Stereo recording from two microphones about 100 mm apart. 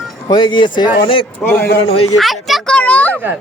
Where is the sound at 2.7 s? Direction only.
15° left (ahead or behind).